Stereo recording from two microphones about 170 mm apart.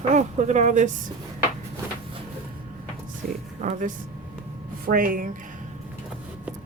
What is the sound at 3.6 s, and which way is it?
A woman's voice, 50° right (ahead or behind).